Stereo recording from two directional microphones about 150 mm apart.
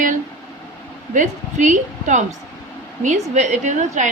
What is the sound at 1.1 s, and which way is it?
A woman's voice, 55° right (ahead or behind).